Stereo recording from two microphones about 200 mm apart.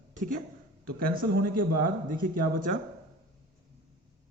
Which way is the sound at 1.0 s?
50° right (ahead or behind).